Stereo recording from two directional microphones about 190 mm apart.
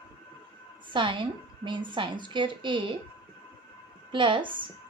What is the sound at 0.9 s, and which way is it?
Speech, 25° right (ahead or behind).